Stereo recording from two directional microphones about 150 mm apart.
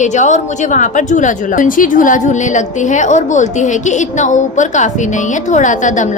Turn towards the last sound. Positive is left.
turn(degrees=55)  # may be behind; listen again after turning